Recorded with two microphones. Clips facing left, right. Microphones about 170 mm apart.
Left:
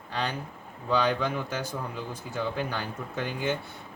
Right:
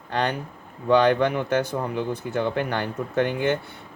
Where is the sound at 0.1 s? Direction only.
60° right (ahead or behind).